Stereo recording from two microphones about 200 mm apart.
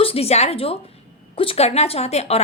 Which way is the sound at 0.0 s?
30° left (ahead or behind).